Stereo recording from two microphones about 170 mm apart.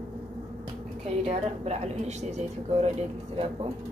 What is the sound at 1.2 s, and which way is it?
A woman's voice, 40° right (ahead or behind).